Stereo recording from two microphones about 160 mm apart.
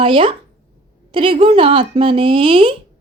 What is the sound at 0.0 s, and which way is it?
A woman's voice, 35° right (ahead or behind).